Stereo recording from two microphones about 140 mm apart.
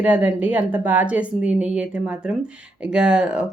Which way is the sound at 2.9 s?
5° right (ahead or behind).